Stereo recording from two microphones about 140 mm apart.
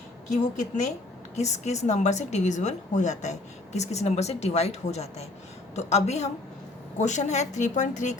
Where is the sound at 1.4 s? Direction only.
55° left (ahead or behind).